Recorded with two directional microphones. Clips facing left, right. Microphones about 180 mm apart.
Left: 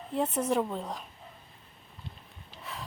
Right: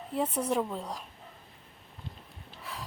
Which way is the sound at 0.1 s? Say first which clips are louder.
Left 1 dB; centre (ahead or behind).